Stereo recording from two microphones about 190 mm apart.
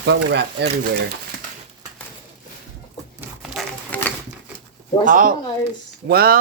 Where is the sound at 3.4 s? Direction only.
5° left (ahead or behind).